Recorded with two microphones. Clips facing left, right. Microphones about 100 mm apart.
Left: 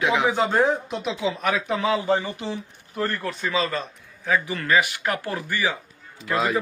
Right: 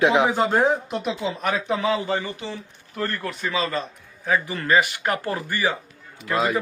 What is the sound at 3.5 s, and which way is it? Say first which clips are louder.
Speech: even; 15° right (ahead or behind).